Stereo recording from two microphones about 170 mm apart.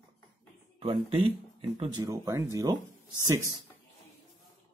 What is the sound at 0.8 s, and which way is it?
Speech, 30° right (ahead or behind).